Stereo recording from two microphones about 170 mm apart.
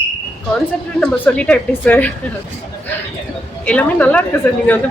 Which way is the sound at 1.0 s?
5° left (ahead or behind).